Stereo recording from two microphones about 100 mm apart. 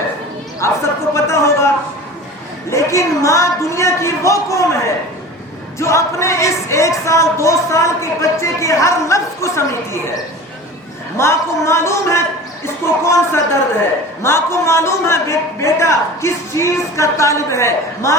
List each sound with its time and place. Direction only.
0.6 s a sound: 30° left (ahead or behind)
2.6 s a man's voice: 30° left (ahead or behind)
5.8 s speech: 30° left (ahead or behind)
11.2 s speech: 25° left (ahead or behind)